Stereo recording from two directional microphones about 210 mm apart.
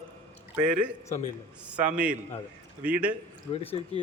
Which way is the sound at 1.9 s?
5° right (ahead or behind).